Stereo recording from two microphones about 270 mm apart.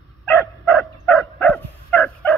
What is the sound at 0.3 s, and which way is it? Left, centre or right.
Dog, centre.